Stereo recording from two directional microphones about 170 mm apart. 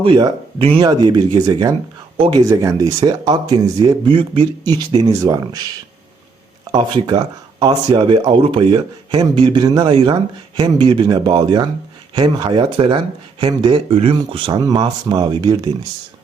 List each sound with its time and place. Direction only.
0.0 s speech: 30° right (ahead or behind)
2.1 s speech: 30° right (ahead or behind)
2.4 s speech: 20° right (ahead or behind)
6.7 s speech: 25° right (ahead or behind)